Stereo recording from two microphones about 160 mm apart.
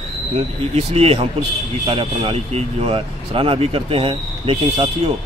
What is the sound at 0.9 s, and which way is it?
Speech, 40° right (ahead or behind).